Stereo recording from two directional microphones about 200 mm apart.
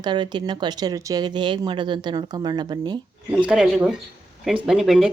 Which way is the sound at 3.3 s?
5° right (ahead or behind).